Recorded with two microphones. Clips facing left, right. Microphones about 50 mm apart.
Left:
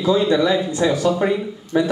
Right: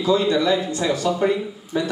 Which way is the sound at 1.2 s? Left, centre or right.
Centre.